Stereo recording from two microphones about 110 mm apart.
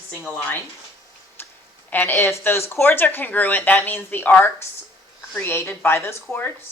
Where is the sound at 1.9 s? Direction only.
15° left (ahead or behind).